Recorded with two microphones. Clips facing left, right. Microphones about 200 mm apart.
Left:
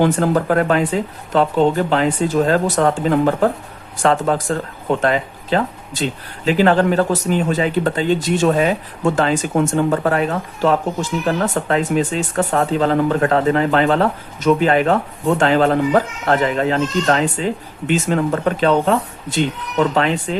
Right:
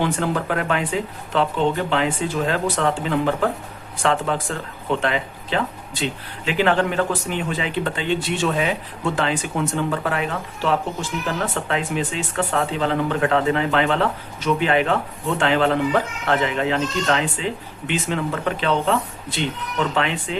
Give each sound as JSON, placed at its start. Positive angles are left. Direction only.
{"t": 0.0, "sound": "speech", "side_deg": 40}